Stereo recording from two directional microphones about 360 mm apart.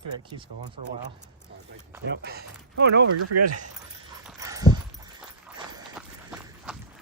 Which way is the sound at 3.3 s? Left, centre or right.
Right.